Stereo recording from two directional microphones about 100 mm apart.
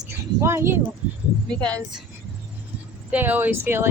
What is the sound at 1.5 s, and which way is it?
Speech, 10° left (ahead or behind).